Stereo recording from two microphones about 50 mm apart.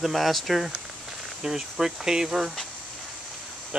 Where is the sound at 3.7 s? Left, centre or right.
Centre.